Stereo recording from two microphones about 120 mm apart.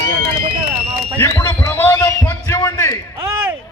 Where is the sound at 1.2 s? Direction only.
20° left (ahead or behind).